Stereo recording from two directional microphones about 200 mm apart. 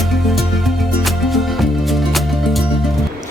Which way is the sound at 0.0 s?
Centre (ahead or behind).